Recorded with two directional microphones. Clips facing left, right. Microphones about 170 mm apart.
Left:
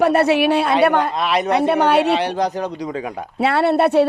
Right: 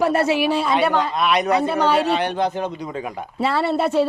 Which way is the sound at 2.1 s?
30° left (ahead or behind).